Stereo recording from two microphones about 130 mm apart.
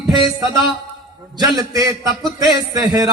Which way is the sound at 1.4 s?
30° right (ahead or behind).